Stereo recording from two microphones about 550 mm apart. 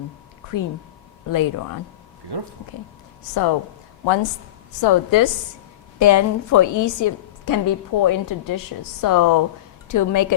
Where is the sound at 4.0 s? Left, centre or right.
Left.